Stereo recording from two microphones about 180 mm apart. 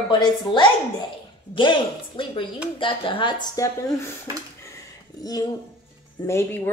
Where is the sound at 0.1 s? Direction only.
25° left (ahead or behind).